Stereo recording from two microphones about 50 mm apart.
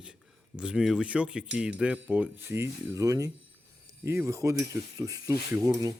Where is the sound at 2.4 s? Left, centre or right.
Right.